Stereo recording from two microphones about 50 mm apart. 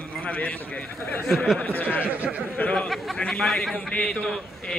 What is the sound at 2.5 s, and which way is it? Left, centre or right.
Speech, left.